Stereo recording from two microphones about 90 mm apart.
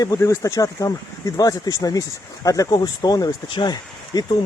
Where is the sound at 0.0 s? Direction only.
35° left (ahead or behind).